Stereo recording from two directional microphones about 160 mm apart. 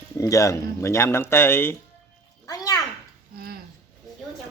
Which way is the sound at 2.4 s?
25° left (ahead or behind).